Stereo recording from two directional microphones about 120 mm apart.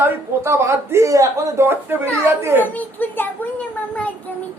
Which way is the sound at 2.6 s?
15° left (ahead or behind).